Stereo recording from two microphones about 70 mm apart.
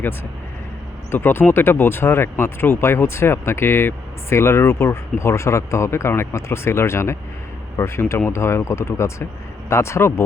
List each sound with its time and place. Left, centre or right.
1.1 s speech: left